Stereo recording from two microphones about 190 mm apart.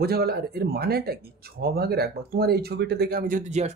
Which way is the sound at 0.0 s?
55° right (ahead or behind).